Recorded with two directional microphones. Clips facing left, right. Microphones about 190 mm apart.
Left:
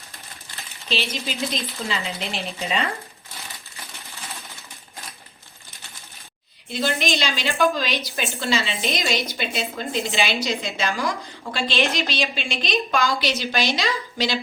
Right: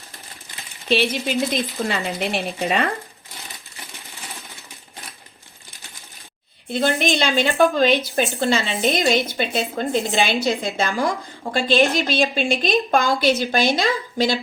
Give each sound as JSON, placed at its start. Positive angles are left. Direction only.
{"t": 0.9, "sound": "speech", "side_deg": -55}
{"t": 6.7, "sound": "a woman's voice", "side_deg": -55}